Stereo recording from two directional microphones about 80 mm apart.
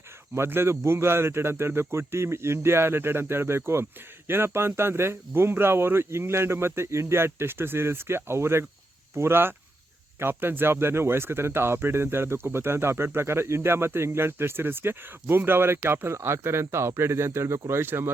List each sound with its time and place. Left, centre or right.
0.3 s speech: right